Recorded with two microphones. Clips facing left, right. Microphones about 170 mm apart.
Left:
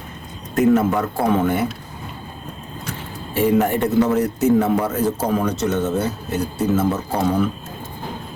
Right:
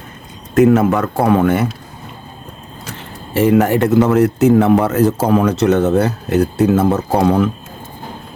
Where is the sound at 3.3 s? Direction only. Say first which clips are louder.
Right 5 dB; 80° right.